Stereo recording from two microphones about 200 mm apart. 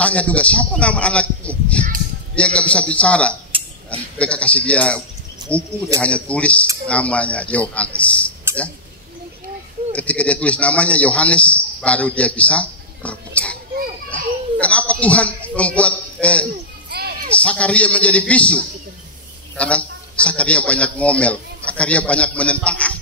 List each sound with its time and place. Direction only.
0.0 s a man's voice: 5° left (ahead or behind)
5.4 s cricket: 20° right (ahead or behind)
5.9 s a man's voice: 5° left (ahead or behind)
8.5 s a sound: 10° right (ahead or behind)
9.9 s a man's voice: 5° left (ahead or behind)
14.1 s a sound: 5° left (ahead or behind)
17.4 s a man's voice: 5° left (ahead or behind)